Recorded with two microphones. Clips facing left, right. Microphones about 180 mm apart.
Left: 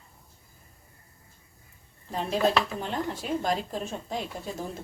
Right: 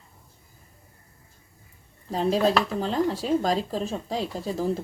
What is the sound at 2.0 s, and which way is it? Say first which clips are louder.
Speech: right 4 dB; 30° right (ahead or behind).